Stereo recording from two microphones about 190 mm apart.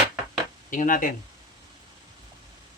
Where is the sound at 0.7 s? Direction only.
45° left (ahead or behind).